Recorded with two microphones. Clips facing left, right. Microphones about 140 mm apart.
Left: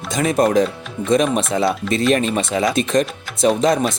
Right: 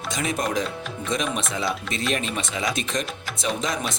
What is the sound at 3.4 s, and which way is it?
Speech, 40° left (ahead or behind).